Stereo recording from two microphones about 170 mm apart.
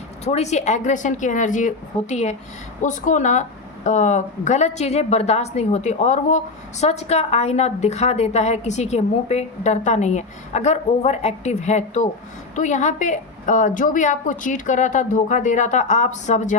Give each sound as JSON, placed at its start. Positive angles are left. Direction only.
{"t": 0.3, "sound": "a woman's voice", "side_deg": 40}